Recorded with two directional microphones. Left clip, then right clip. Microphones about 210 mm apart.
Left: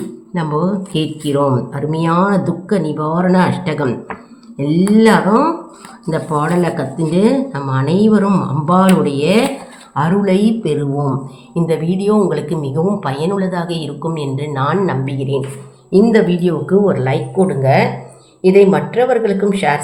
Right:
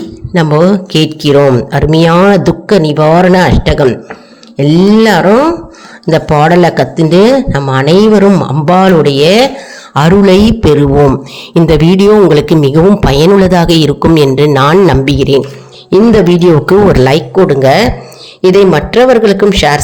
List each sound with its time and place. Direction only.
0.3 s a man's voice: 45° right (ahead or behind)